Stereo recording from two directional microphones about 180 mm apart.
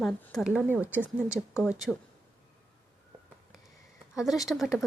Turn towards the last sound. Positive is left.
turn(degrees=0)  # may be behind; listen again after turning